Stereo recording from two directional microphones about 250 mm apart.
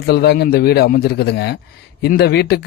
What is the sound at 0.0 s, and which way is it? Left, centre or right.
Speech, left.